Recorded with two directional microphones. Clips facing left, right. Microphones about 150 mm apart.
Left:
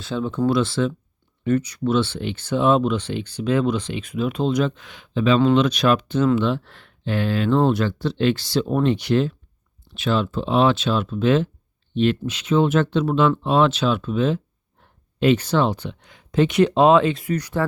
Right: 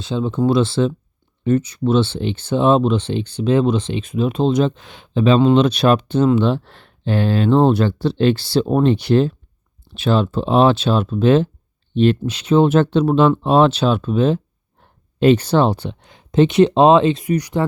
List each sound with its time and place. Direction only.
0.0 s speech: 20° right (ahead or behind)